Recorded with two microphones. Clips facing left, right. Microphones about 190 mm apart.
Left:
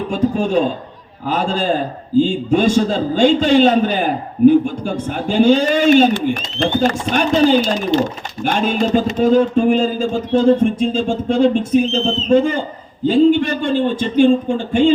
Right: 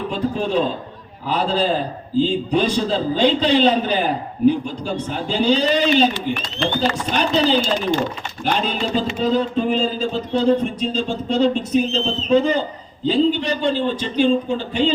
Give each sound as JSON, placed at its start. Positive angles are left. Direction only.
{"t": 0.1, "sound": "a man's voice", "side_deg": 45}